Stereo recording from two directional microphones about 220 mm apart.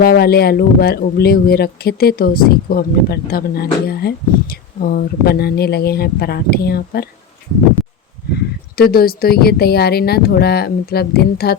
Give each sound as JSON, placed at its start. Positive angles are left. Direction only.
{"t": 0.0, "sound": "speech", "side_deg": 45}
{"t": 7.8, "sound": "a sound", "side_deg": 0}
{"t": 8.8, "sound": "speech", "side_deg": 45}